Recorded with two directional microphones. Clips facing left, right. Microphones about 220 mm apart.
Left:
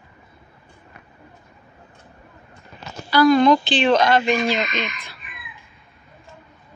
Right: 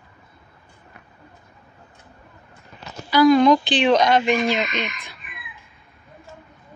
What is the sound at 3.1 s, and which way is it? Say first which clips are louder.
A woman's voice: even; 15° right (ahead or behind).